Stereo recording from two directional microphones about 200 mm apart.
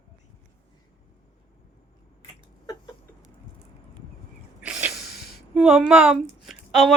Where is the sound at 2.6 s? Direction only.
20° left (ahead or behind).